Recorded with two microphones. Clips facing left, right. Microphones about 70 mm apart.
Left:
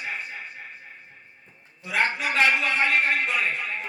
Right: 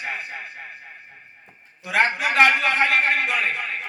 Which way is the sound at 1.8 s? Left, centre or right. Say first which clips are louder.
Right 4 dB; right.